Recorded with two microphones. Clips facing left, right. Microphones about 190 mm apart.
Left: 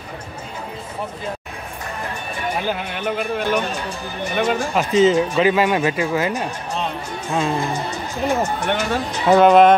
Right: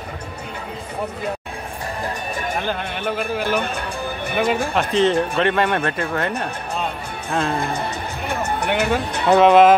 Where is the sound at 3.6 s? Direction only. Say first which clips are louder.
Even; 55° right (ahead or behind).